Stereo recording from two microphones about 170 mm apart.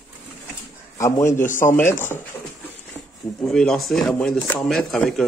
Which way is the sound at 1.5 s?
50° left (ahead or behind).